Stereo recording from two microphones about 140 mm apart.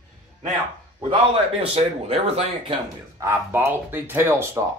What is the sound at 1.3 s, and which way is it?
Speech, 45° right (ahead or behind).